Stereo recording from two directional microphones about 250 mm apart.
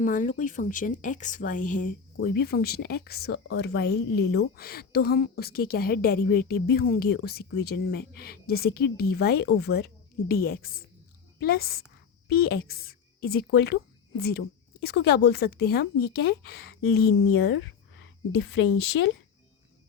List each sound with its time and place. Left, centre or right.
0.0 s a woman's voice: left